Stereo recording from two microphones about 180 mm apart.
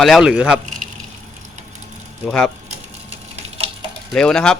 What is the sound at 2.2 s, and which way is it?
Speech, 5° left (ahead or behind).